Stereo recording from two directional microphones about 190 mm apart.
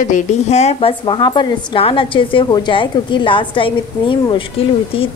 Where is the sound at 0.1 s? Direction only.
35° left (ahead or behind).